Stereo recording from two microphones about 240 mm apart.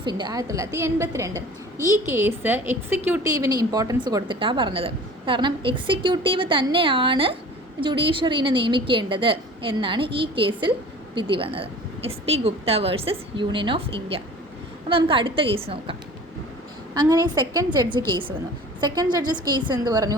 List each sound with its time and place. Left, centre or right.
0.0 s a woman's voice: centre